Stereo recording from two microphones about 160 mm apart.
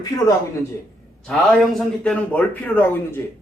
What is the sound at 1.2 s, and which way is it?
A man's voice, centre (ahead or behind).